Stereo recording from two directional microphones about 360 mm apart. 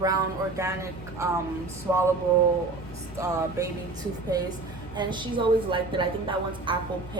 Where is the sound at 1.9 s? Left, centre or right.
Centre.